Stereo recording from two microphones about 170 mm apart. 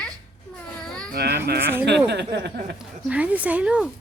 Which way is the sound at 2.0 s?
85° right.